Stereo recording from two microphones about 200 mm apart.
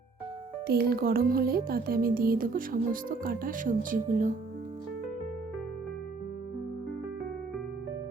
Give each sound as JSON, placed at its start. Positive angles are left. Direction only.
{"t": 0.7, "sound": "speech", "side_deg": -50}